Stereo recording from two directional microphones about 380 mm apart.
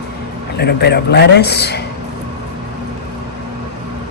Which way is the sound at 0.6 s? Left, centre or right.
Left.